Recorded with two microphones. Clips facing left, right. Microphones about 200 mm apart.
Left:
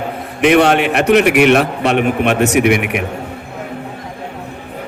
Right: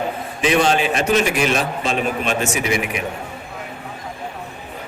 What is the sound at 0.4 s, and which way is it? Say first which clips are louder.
A man's voice: left 6 dB; 65° left (ahead or behind).